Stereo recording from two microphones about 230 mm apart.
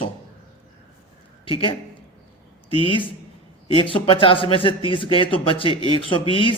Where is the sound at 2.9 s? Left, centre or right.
Left.